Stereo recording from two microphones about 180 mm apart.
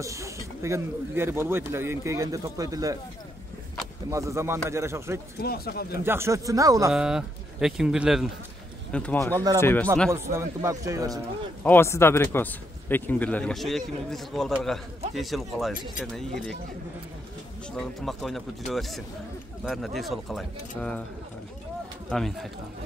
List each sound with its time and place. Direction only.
0.0 s speech: 15° right (ahead or behind)
4.1 s speech: 15° right (ahead or behind)
5.4 s speech: 60° left (ahead or behind)
6.0 s speech: 15° right (ahead or behind)
6.9 s speech: 5° right (ahead or behind)
8.9 s a man's voice: 10° left (ahead or behind)
10.1 s speech: 15° right (ahead or behind)
11.6 s a man's voice: 10° left (ahead or behind)
17.7 s speech: centre (ahead or behind)
22.1 s speech: centre (ahead or behind)